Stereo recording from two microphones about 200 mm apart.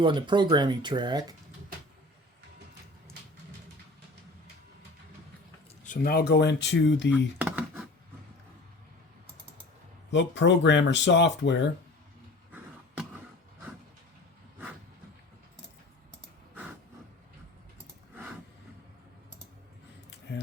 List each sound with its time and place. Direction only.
0.0 s speech: 25° right (ahead or behind)
5.8 s speech: 45° left (ahead or behind); by 7.3 s 65° left (ahead or behind)
7.3 s a sound: 10° right (ahead or behind)
10.1 s speech: 60° left (ahead or behind)